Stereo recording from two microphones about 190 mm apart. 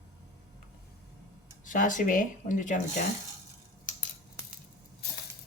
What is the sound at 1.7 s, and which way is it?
Speech, 45° left (ahead or behind).